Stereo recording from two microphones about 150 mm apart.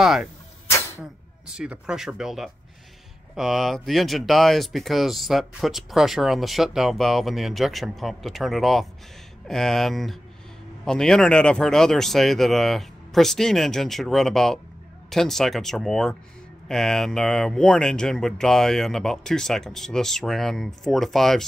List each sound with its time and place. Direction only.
0.0 s speech: centre (ahead or behind)
0.7 s a sound: 20° left (ahead or behind)
1.5 s speech: 5° right (ahead or behind)